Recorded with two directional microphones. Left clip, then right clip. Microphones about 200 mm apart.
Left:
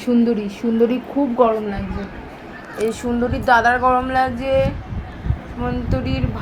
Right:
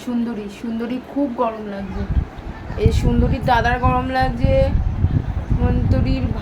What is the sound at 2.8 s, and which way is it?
Speech, centre (ahead or behind).